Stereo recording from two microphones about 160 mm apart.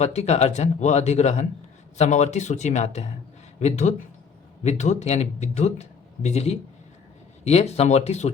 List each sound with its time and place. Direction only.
0.0 s speech: 45° left (ahead or behind)